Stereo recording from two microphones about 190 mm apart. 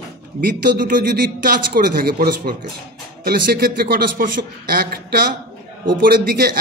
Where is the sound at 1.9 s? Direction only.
50° right (ahead or behind).